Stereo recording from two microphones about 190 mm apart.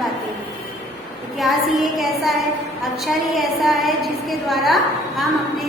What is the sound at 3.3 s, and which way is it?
A woman's voice, centre (ahead or behind).